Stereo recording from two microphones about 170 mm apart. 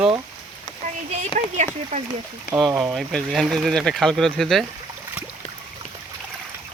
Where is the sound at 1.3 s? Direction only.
45° right (ahead or behind).